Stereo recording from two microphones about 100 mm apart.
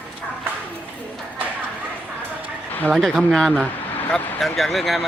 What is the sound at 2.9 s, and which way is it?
Speech, centre (ahead or behind).